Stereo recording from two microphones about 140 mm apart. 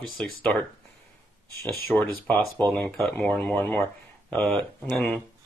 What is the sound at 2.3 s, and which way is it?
Speech, 5° left (ahead or behind).